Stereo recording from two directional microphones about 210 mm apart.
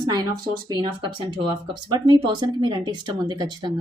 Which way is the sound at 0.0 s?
20° right (ahead or behind).